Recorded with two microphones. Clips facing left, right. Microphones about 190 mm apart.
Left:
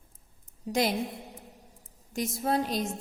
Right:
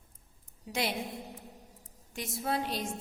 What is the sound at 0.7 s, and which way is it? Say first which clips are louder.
Speech: left 6 dB; 40° left (ahead or behind).